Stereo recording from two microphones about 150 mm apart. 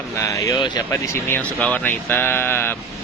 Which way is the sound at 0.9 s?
15° left (ahead or behind).